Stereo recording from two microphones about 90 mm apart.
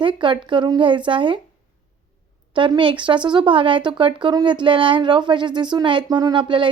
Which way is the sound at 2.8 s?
65° right (ahead or behind).